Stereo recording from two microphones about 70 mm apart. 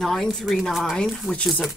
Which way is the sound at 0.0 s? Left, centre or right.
Centre.